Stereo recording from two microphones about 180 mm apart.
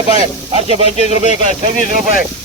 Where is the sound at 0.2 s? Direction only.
35° right (ahead or behind).